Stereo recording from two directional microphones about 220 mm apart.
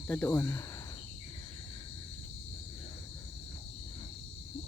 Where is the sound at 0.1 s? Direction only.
10° left (ahead or behind).